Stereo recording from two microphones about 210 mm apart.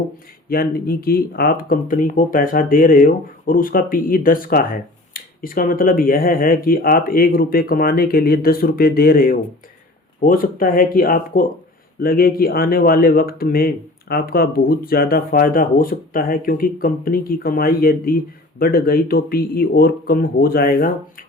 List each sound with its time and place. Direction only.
0.5 s speech: 45° left (ahead or behind)